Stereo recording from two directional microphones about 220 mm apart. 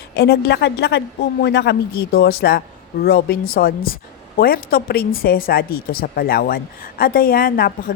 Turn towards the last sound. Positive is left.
turn(degrees=40)  # may be behind; listen again after turning